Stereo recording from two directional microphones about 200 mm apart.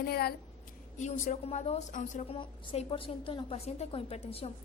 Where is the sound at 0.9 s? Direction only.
35° left (ahead or behind).